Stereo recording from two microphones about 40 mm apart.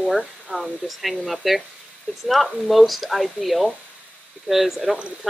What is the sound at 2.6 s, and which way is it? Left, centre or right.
Speech, centre.